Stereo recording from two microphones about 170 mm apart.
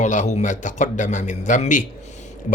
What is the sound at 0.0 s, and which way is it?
Speech, 45° left (ahead or behind).